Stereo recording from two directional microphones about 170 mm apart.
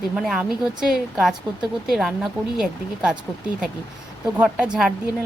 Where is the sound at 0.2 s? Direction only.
5° right (ahead or behind).